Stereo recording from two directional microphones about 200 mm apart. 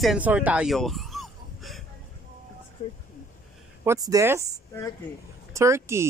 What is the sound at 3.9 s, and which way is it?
Speech, 15° right (ahead or behind).